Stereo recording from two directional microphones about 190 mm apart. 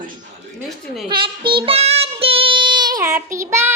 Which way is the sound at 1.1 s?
25° right (ahead or behind).